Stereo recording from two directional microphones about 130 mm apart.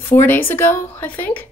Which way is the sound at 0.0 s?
20° left (ahead or behind).